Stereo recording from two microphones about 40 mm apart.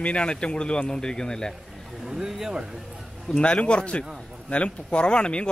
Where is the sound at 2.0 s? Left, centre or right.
Centre.